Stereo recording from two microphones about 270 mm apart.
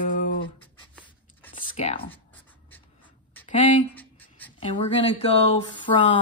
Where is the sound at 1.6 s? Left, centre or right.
Left.